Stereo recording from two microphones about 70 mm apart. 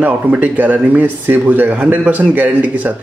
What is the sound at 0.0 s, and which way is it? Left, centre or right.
A man's voice, right.